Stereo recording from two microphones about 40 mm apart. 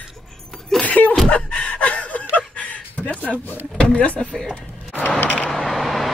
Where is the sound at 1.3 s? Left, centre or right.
Left.